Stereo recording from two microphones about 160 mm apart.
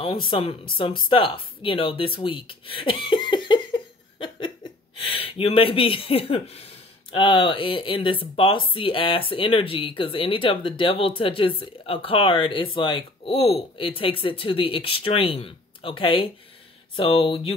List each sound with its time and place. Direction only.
0.0 s speech: 35° left (ahead or behind)